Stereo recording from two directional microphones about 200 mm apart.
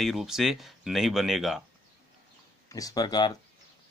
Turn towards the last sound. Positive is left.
turn(degrees=20)  # may be behind; listen again after turning